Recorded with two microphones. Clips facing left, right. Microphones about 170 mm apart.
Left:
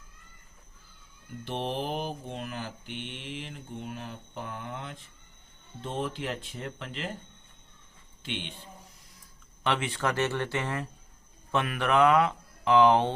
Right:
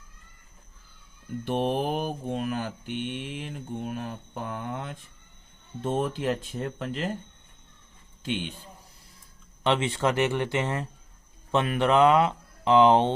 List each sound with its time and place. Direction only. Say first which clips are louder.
1.5 s mantra: right 6 dB; 50° right (ahead or behind)
8.2 s a man's voice: right 6 dB; 40° right (ahead or behind)
9.6 s speech: right 4 dB; 25° right (ahead or behind)